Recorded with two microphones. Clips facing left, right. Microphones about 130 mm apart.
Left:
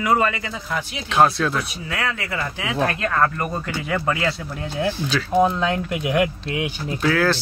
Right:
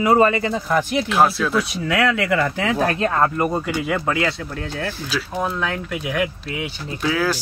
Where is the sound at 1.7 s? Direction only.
85° right.